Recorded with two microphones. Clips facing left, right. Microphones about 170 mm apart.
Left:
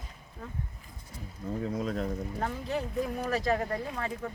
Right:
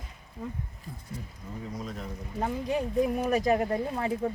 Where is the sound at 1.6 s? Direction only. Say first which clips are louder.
Left 6 dB; 60° left (ahead or behind).